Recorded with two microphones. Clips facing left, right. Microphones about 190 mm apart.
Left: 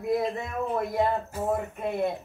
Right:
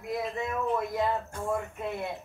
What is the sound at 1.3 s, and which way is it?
Speech, 5° left (ahead or behind).